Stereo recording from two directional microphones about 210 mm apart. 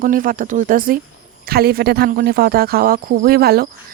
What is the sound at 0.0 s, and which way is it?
Speech, 40° right (ahead or behind).